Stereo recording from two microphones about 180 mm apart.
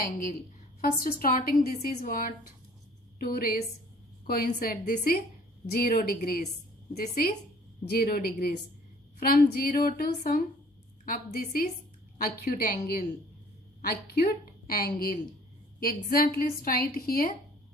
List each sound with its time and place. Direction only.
0.0 s a woman's voice: 50° left (ahead or behind)